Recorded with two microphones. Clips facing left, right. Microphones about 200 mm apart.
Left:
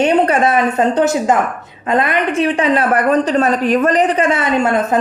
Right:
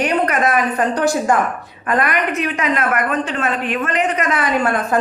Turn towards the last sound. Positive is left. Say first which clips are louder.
# left 3 dB
turn(degrees=25)  # may be behind; listen again after turning